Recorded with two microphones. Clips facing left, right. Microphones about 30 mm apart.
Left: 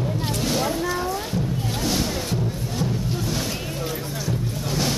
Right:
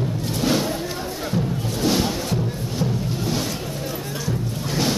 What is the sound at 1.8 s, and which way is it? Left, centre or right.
Music, centre.